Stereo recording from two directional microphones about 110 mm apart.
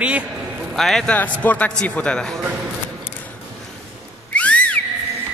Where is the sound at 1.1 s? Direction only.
15° left (ahead or behind).